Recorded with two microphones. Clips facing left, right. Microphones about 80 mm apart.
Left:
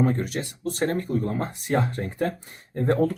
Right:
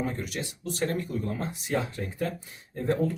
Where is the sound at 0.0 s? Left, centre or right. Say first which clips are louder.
Left 8 dB; left.